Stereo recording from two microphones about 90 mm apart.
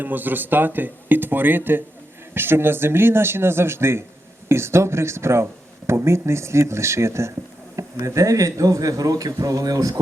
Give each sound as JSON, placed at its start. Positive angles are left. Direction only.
{"t": 0.0, "sound": "speech", "side_deg": -20}